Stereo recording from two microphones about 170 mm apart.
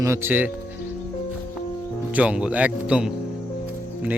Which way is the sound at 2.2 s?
5° right (ahead or behind).